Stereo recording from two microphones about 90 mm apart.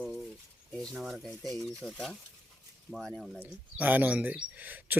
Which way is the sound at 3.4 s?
20° right (ahead or behind).